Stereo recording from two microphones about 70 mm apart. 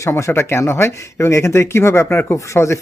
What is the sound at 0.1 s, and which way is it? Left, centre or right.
Speech, left.